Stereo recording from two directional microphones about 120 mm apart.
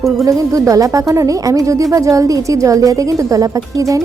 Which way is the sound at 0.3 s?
25° right (ahead or behind).